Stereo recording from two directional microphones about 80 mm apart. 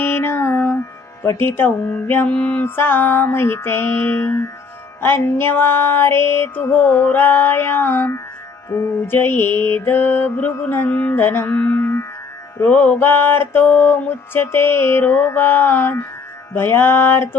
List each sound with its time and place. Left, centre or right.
0.0 s mantra: left
1.2 s music: left
8.7 s mantra: left
9.0 s music: left